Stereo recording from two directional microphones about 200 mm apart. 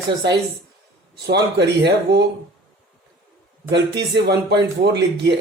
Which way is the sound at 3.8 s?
55° right (ahead or behind).